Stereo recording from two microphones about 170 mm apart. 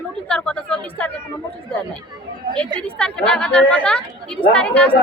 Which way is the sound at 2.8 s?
5° left (ahead or behind).